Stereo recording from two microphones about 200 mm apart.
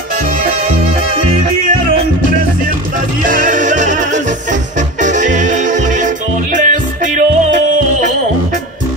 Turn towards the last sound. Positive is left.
turn(degrees=-40)  # may be behind; listen again after turning